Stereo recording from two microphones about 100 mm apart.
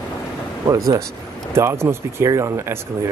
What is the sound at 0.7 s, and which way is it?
Speech, 35° right (ahead or behind).